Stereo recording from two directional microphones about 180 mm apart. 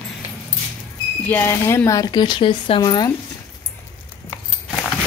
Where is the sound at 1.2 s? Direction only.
10° left (ahead or behind).